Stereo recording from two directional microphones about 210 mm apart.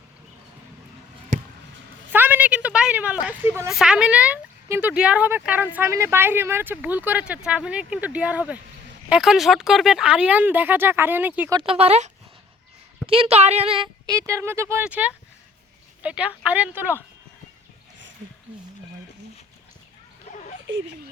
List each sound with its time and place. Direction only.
2.0 s a woman's voice: 10° right (ahead or behind)
11.5 s speech: 25° right (ahead or behind); by 17.0 s 10° right (ahead or behind)
20.3 s a sound: 35° left (ahead or behind)